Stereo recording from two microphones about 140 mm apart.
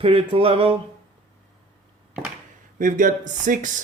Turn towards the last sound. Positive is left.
turn(degrees=-65)  # may be behind; listen again after turning